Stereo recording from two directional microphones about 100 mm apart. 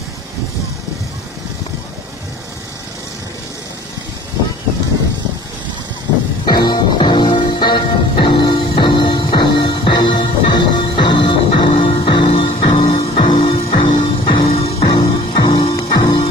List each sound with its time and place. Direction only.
6.4 s music: 45° left (ahead or behind)
14.4 s music: 90° left
14.8 s music: 50° left (ahead or behind)
15.7 s music: 45° left (ahead or behind)